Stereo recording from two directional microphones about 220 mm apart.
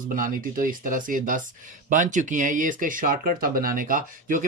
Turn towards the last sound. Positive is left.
turn(degrees=-40)  # may be behind; listen again after turning